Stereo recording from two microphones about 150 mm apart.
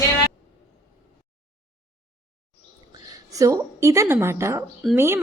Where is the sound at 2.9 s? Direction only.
20° right (ahead or behind).